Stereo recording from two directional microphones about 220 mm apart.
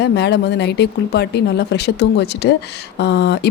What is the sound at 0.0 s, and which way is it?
Speech, 50° left (ahead or behind).